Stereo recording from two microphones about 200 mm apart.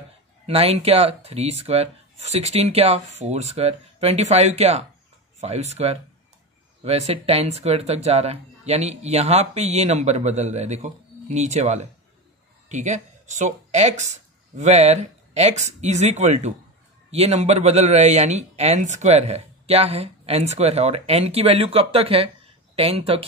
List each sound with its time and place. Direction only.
0.5 s speech: 30° right (ahead or behind)
6.8 s speech: 30° right (ahead or behind)